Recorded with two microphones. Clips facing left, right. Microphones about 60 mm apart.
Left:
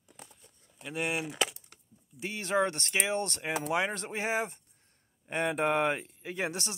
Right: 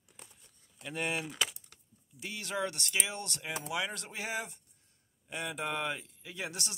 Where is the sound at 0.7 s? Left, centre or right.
Centre.